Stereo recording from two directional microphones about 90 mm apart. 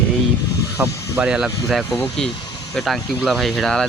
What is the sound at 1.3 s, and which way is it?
Speech, 5° right (ahead or behind).